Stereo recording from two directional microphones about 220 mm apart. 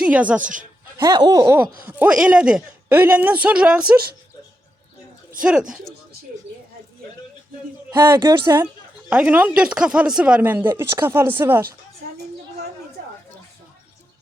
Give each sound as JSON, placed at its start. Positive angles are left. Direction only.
{"t": 0.0, "sound": "a woman's voice", "side_deg": -5}
{"t": 0.9, "sound": "a woman's voice", "side_deg": -20}
{"t": 5.4, "sound": "speech", "side_deg": -5}
{"t": 7.9, "sound": "a woman's voice", "side_deg": -15}